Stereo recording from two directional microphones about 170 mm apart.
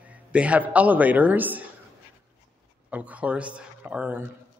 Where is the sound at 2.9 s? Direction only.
10° right (ahead or behind).